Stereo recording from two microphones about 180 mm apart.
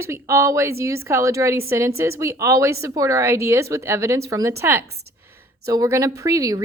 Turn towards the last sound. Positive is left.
turn(degrees=-20)  # may be behind; listen again after turning